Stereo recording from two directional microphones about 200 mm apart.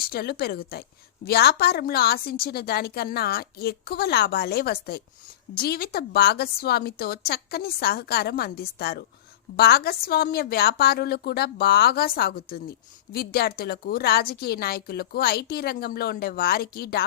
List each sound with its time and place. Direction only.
0.0 s a woman's voice: 50° left (ahead or behind)